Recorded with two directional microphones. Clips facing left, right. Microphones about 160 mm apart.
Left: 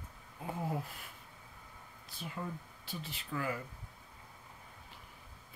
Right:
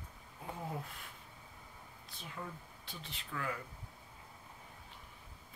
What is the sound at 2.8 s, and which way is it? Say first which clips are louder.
Speech: left 6 dB; 5° left (ahead or behind).